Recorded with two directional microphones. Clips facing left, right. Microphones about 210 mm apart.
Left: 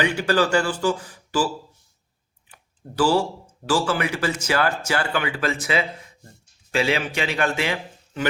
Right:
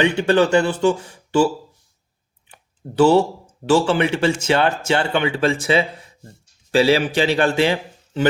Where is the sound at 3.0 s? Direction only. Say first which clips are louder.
Right 6 dB; 25° right (ahead or behind).